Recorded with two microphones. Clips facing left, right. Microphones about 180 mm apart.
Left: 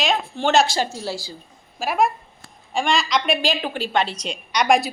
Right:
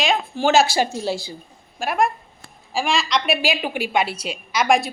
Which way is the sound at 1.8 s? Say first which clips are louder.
Even; 5° left (ahead or behind).